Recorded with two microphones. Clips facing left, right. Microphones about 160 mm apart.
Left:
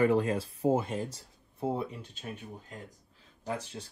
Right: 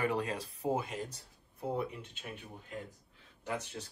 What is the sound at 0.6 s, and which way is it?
Speech, 35° left (ahead or behind).